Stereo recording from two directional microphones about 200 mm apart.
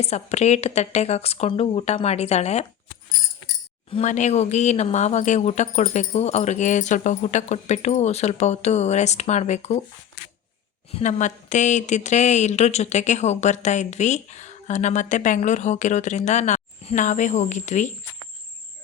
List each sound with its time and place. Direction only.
0.0 s a woman's voice: 30° left (ahead or behind)
3.9 s a woman's voice: 35° left (ahead or behind)
10.9 s a woman's voice: 35° left (ahead or behind)